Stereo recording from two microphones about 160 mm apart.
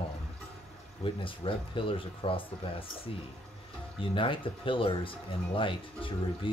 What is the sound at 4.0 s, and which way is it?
Speech, 35° left (ahead or behind).